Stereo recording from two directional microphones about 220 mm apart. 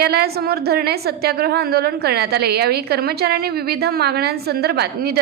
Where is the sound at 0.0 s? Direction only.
45° right (ahead or behind).